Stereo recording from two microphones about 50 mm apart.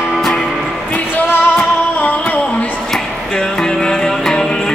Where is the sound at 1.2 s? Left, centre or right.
Left.